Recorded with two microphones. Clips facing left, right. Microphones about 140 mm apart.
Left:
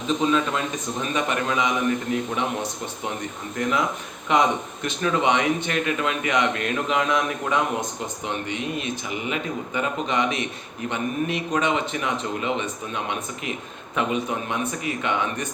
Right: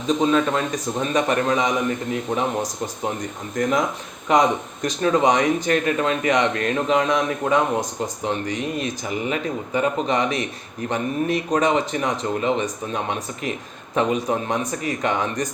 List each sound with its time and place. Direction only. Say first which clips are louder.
0.1 s speech: right 3 dB; 40° right (ahead or behind)